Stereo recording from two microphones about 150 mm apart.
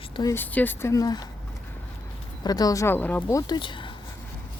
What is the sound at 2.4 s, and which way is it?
Speech, 25° left (ahead or behind).